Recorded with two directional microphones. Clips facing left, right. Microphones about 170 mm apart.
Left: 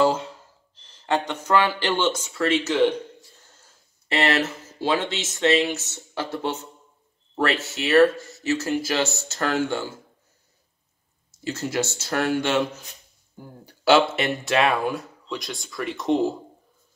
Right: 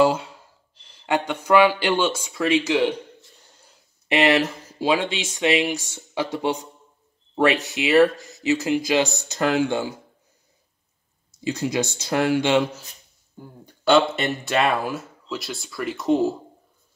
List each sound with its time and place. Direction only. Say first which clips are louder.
0.0 s speech: right 2 dB; 10° right (ahead or behind)
11.4 s speech: right 2 dB; 15° right (ahead or behind)
13.7 s speech: even; 5° left (ahead or behind)